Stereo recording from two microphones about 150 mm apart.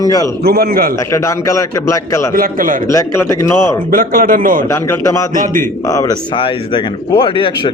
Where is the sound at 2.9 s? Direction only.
20° left (ahead or behind).